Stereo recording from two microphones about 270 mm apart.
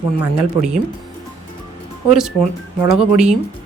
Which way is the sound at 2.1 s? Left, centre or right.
Centre.